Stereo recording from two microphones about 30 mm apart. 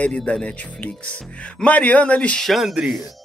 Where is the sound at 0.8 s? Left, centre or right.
Left.